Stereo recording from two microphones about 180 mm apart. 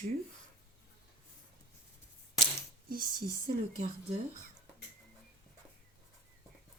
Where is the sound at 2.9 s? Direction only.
50° right (ahead or behind).